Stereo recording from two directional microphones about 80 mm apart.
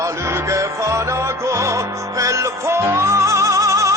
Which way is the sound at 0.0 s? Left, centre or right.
Right.